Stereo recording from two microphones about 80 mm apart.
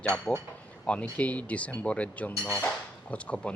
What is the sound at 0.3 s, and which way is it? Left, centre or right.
Speech, centre.